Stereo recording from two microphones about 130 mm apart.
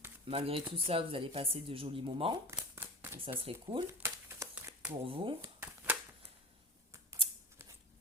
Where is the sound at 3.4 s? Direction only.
45° right (ahead or behind).